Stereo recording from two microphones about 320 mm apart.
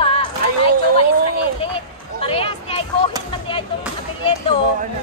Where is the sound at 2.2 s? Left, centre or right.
Centre.